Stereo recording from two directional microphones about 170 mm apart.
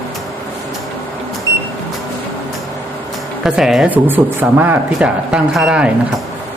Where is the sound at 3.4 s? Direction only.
Centre (ahead or behind).